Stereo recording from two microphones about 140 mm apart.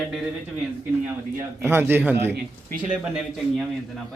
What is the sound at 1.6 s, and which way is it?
Speech, 15° right (ahead or behind).